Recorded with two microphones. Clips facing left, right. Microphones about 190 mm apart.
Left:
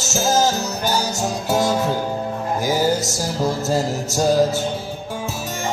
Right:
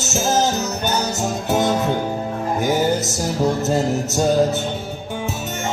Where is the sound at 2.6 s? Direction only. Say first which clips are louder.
Even; centre (ahead or behind).